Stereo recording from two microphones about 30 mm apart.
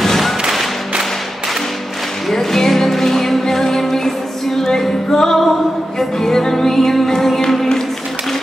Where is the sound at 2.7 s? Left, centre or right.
Centre.